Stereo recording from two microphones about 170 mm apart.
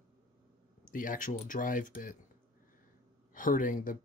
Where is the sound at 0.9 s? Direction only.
50° left (ahead or behind).